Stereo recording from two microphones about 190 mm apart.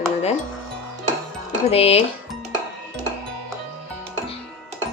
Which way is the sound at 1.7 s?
30° left (ahead or behind).